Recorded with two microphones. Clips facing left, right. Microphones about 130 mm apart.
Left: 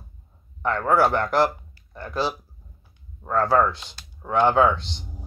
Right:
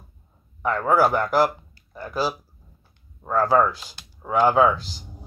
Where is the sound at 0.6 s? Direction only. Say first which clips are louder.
Right 1 dB; 5° right (ahead or behind).